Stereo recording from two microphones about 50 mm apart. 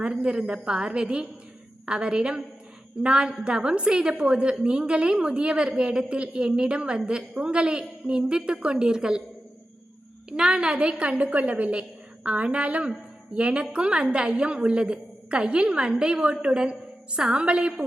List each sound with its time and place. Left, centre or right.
0.0 s a woman's voice: centre
10.2 s a woman's voice: centre